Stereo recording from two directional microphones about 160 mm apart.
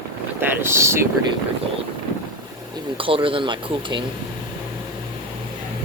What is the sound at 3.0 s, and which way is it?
Speech, 35° right (ahead or behind).